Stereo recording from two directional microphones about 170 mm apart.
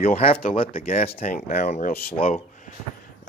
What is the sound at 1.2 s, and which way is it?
Speech, 50° left (ahead or behind).